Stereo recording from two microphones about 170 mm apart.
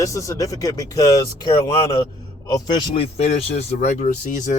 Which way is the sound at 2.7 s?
35° left (ahead or behind).